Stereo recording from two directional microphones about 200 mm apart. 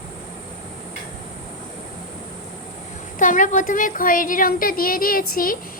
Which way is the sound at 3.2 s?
40° left (ahead or behind).